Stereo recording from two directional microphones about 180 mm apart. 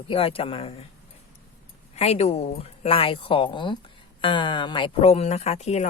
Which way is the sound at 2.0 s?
35° left (ahead or behind).